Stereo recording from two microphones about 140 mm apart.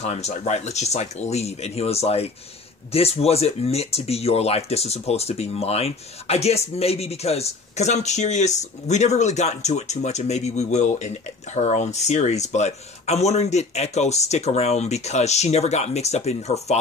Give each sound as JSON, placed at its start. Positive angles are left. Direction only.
{"t": 0.0, "sound": "speech", "side_deg": 55}